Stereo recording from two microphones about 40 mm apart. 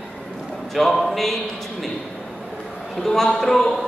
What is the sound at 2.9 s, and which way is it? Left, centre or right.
Speech, centre.